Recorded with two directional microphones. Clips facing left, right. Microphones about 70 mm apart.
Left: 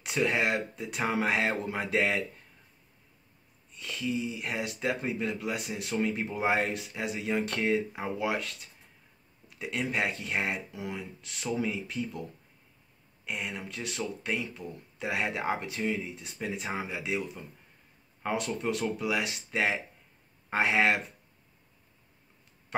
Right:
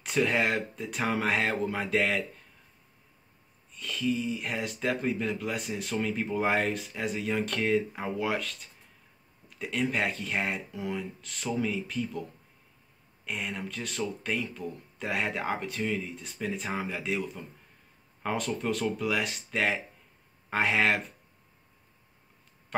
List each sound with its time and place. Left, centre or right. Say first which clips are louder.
0.0 s speech: right 1 dB; centre
3.8 s speech: right 2 dB; centre
9.6 s speech: right 2 dB; centre
13.2 s speech: right 1 dB; centre